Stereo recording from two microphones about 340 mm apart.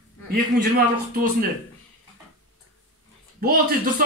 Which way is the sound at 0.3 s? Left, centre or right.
Right.